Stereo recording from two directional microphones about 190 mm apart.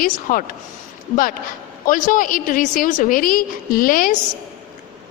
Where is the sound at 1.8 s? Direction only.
45° left (ahead or behind).